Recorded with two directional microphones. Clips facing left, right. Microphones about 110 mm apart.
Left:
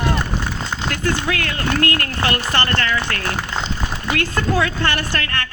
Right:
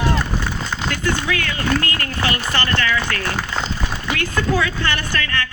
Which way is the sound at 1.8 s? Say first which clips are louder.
Left 3 dB; 50° left (ahead or behind).